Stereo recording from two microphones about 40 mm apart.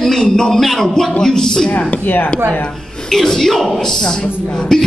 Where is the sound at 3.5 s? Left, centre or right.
Centre.